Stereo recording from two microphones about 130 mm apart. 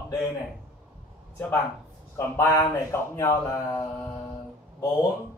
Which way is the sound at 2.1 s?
15° left (ahead or behind).